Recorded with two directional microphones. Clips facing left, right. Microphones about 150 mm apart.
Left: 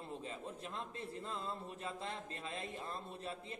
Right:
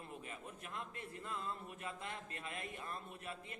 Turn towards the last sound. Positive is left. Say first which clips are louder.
# left 3 dB
turn(degrees=30)  # may be behind; listen again after turning